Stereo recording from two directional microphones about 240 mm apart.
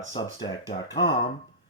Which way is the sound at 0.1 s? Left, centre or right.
Centre.